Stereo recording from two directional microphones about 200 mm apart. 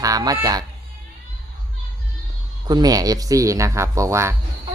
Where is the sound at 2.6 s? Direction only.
20° right (ahead or behind).